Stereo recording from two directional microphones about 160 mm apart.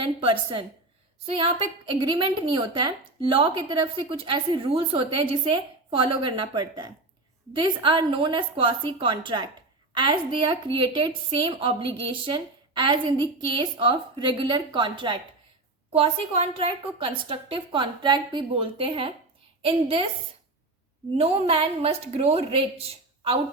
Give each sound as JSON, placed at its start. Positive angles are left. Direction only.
{"t": 0.0, "sound": "a woman's voice", "side_deg": -30}
{"t": 21.2, "sound": "a woman's voice", "side_deg": -35}